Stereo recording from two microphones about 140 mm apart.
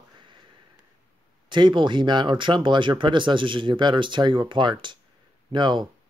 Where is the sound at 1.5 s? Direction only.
35° right (ahead or behind).